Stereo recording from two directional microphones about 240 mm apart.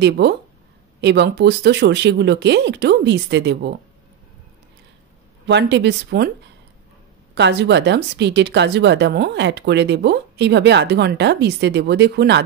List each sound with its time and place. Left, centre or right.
0.0 s speech: right
5.5 s speech: right
7.3 s speech: right